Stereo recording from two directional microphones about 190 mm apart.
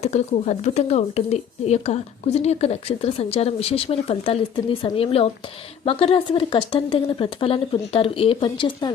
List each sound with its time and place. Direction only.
0.0 s a woman's voice: 35° left (ahead or behind)